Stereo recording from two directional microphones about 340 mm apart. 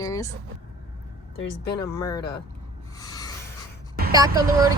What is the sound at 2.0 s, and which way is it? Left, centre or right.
Speech, centre.